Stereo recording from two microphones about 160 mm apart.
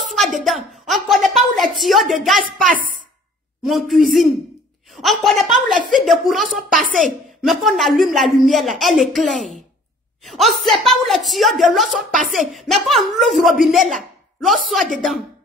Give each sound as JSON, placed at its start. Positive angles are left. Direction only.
{"t": 0.1, "sound": "a sound", "side_deg": 0}
{"t": 2.6, "sound": "a woman's voice", "side_deg": -60}
{"t": 3.6, "sound": "speech", "side_deg": 0}